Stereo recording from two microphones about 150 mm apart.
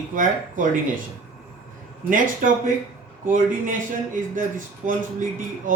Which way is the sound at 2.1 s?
65° right (ahead or behind).